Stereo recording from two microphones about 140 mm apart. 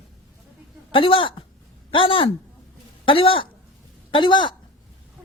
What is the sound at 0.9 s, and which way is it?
A woman's voice, 40° left (ahead or behind).